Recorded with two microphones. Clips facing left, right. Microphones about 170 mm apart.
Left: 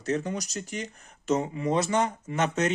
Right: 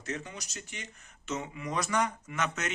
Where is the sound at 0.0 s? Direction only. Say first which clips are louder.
Left 10 dB; 40° left (ahead or behind).